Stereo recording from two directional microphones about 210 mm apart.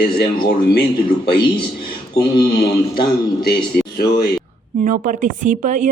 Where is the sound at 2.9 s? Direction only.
45° left (ahead or behind).